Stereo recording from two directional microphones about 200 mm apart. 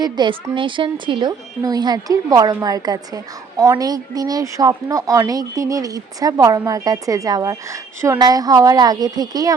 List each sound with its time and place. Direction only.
0.0 s a woman's voice: 20° right (ahead or behind)